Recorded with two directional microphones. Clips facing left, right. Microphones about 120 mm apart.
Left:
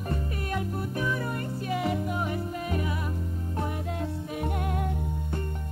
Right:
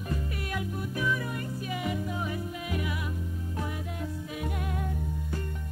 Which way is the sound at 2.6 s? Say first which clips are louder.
Left 3 dB; 40° left (ahead or behind).